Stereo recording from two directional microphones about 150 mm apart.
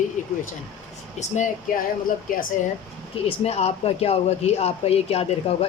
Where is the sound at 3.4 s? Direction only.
40° left (ahead or behind).